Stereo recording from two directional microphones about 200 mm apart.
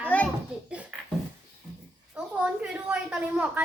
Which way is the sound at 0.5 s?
5° right (ahead or behind).